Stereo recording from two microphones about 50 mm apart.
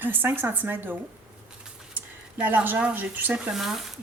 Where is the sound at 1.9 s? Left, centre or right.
Right.